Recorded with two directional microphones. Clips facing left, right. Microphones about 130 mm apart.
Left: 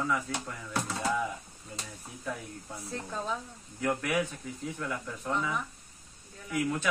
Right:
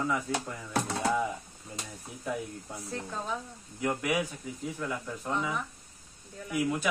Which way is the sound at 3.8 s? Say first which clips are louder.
Even; 10° right (ahead or behind).